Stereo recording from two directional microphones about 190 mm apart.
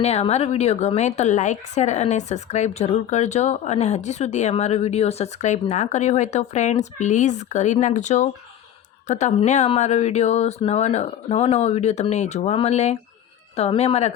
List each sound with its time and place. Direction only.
0.0 s speech: 35° left (ahead or behind)